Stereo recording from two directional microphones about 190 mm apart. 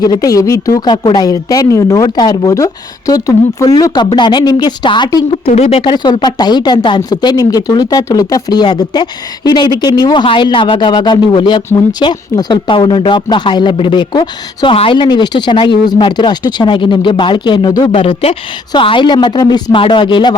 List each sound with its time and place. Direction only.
0.0 s speech: 20° left (ahead or behind)
5.5 s speech: 35° left (ahead or behind)